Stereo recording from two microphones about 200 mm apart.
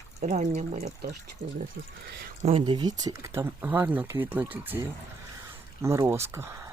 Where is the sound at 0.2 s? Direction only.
35° right (ahead or behind).